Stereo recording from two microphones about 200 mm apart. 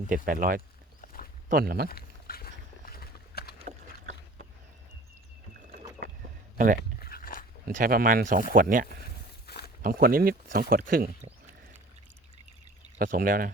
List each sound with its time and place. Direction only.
0.3 s speech: 45° right (ahead or behind)
1.0 s a sound: 45° left (ahead or behind)
1.5 s speech: 50° right (ahead or behind)
1.9 s a sound: 50° left (ahead or behind)
3.6 s boat: 35° right (ahead or behind)
7.0 s dog: 45° left (ahead or behind)
7.6 s speech: 45° right (ahead or behind)
9.5 s a sound: 55° left (ahead or behind)
9.8 s speech: 45° right (ahead or behind)
13.0 s speech: 45° right (ahead or behind)